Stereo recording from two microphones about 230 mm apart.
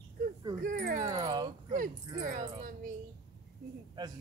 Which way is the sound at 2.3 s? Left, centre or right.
Right.